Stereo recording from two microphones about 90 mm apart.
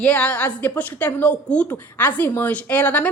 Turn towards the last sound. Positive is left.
turn(degrees=15)  # may be behind; listen again after turning